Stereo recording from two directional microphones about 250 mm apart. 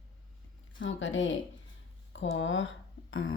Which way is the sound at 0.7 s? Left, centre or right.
Left.